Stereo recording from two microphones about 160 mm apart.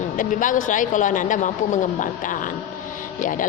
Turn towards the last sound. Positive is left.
turn(degrees=55)  # may be behind; listen again after turning